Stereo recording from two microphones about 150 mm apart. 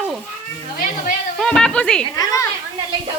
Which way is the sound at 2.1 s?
20° left (ahead or behind).